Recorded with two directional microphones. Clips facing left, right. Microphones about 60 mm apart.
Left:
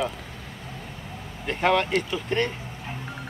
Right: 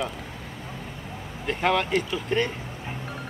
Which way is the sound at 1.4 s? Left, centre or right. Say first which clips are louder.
Left 1 dB; centre.